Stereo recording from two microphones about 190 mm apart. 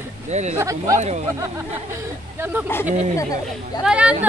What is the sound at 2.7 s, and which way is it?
Speech, 10° left (ahead or behind).